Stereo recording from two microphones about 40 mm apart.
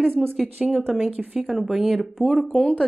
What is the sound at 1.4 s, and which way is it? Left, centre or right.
Speech, centre.